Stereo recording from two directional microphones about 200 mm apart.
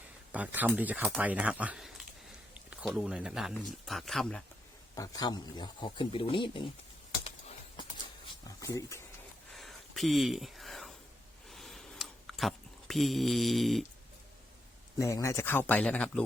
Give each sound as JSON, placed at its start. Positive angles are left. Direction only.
{"t": 0.3, "sound": "speech", "side_deg": -10}
{"t": 4.9, "sound": "a man's voice", "side_deg": 20}
{"t": 8.6, "sound": "speech", "side_deg": 15}
{"t": 9.5, "sound": "a sound", "side_deg": 0}
{"t": 14.9, "sound": "speech", "side_deg": 15}